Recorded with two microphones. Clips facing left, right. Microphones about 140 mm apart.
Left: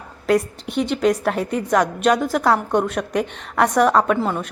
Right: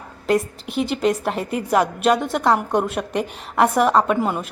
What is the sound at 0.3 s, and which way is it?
A woman's voice, centre (ahead or behind).